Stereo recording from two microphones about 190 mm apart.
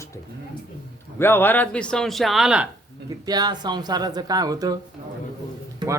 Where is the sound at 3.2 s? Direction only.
20° right (ahead or behind).